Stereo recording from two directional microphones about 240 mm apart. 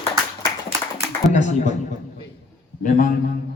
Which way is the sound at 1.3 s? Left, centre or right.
Left.